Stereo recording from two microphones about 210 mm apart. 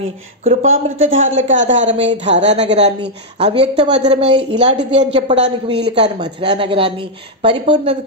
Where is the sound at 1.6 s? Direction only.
60° right (ahead or behind).